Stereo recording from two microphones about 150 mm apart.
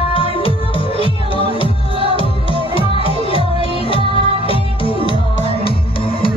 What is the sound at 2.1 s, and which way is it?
Music, 35° left (ahead or behind).